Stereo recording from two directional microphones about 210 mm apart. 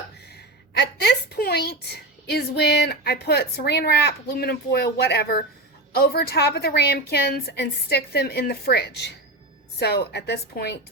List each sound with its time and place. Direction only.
0.8 s a woman's voice: 50° left (ahead or behind)